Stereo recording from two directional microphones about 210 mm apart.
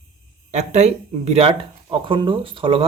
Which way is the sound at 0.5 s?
30° right (ahead or behind).